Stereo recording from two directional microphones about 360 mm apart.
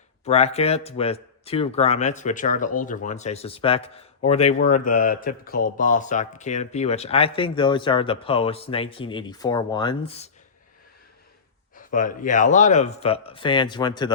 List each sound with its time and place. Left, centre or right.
0.3 s speech: centre
11.7 s speech: left